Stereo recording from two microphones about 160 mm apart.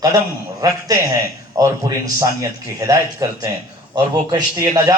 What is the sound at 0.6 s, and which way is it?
A man's voice, 20° right (ahead or behind).